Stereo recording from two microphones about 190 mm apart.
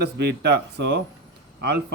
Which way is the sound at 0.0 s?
60° right (ahead or behind).